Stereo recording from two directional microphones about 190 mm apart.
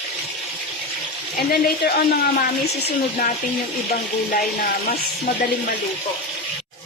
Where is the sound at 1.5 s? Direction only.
55° left (ahead or behind).